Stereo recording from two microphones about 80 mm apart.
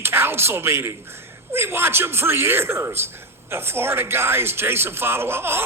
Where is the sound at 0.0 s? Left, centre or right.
Right.